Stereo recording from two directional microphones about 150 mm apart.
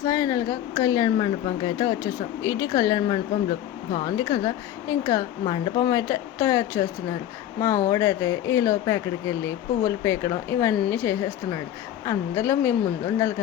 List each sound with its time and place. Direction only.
0.0 s speech: 25° left (ahead or behind)